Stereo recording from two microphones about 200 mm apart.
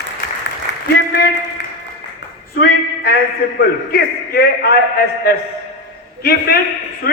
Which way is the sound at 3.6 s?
50° left (ahead or behind).